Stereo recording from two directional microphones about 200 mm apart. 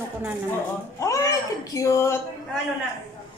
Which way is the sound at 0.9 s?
15° left (ahead or behind).